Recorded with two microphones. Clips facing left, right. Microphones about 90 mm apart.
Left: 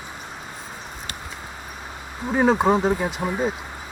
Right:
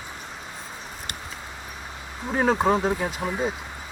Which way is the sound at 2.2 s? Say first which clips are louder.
Left 3 dB; 5° left (ahead or behind).